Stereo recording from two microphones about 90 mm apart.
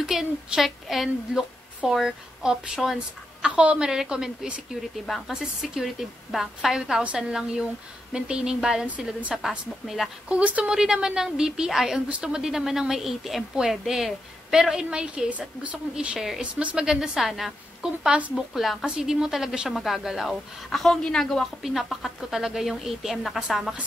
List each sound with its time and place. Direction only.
0.0 s a woman's voice: 5° right (ahead or behind)